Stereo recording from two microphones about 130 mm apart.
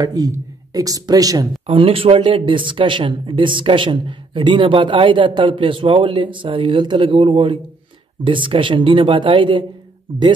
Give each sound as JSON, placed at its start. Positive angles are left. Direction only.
{"t": 0.0, "sound": "speech", "side_deg": -30}
{"t": 1.7, "sound": "speech", "side_deg": -45}